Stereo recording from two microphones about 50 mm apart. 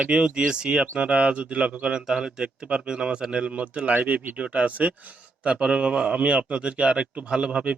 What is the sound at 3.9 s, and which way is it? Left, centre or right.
Speech, right.